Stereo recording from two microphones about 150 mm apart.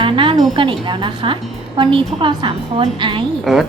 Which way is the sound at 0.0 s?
35° right (ahead or behind).